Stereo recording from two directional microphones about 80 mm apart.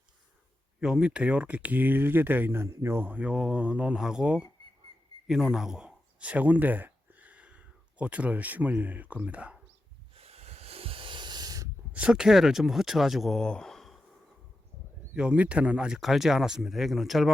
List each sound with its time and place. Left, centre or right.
0.8 s speech: centre
11.0 s hiss: right
11.9 s speech: centre
13.4 s a sound: centre
15.1 s speech: centre
16.0 s speech: centre